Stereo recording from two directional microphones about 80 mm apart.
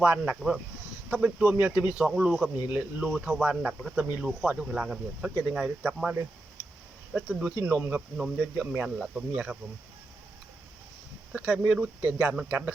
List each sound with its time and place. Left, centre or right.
0.0 s speech: centre
7.3 s speech: centre
11.3 s speech: centre